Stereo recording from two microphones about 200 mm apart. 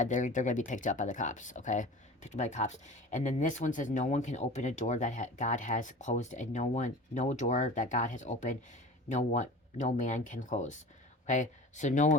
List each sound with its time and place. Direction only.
0.0 s speech: 40° left (ahead or behind)